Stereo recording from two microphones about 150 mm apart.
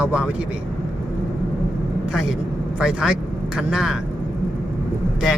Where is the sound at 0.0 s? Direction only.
10° right (ahead or behind).